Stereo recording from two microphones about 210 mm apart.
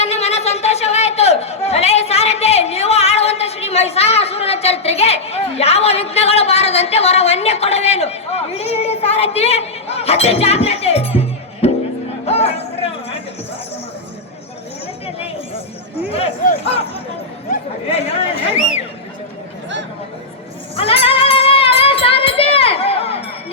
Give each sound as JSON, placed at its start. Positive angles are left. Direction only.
{"t": 0.0, "sound": "chatter", "side_deg": 30}
{"t": 11.6, "sound": "music", "side_deg": 30}
{"t": 12.2, "sound": "a sound", "side_deg": 30}
{"t": 16.1, "sound": "speech", "side_deg": 30}
{"t": 17.9, "sound": "speech", "side_deg": 30}
{"t": 20.7, "sound": "music", "side_deg": 25}